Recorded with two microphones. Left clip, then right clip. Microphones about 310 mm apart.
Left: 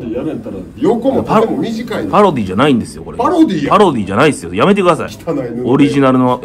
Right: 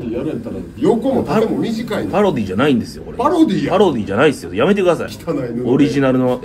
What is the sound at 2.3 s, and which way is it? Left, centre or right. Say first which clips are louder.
Speech: left 3 dB; centre.